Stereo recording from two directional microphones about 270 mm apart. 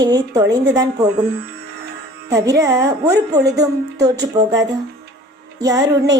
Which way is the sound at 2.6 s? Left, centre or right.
Centre.